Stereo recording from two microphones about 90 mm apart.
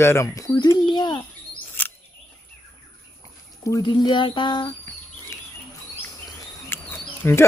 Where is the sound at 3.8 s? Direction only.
60° left (ahead or behind).